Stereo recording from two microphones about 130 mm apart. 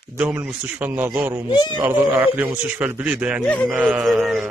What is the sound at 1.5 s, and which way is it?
Speech, 35° left (ahead or behind).